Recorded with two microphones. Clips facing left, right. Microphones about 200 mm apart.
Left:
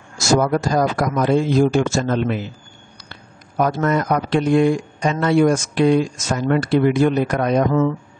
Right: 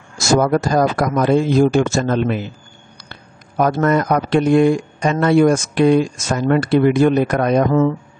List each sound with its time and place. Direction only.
0.3 s speech: 55° right (ahead or behind)